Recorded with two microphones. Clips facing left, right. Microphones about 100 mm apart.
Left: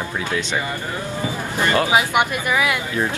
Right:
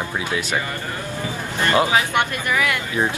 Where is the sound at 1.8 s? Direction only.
15° left (ahead or behind).